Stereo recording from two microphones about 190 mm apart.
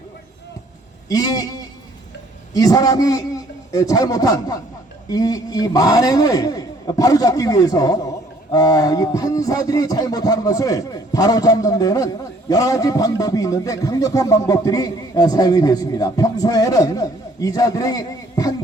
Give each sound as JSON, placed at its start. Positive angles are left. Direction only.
{"t": 1.0, "sound": "a man's voice", "side_deg": 20}
{"t": 8.5, "sound": "a sound", "side_deg": 20}
{"t": 9.6, "sound": "a man's voice", "side_deg": 20}